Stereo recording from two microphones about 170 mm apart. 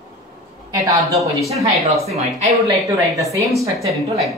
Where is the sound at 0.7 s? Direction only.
20° right (ahead or behind).